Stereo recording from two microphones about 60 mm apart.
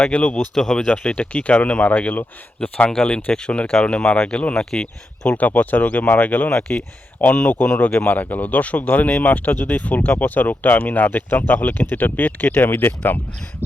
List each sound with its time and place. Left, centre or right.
0.1 s speech: left
0.5 s speech: centre
1.1 s speech: left; by 5.3 s centre
5.3 s speech: left
6.5 s speech: centre
7.2 s speech: left
7.6 s speech: centre
8.0 s speech: left
13.6 s a sound: right